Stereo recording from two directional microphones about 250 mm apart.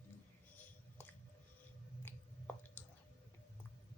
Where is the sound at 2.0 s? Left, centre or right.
Centre.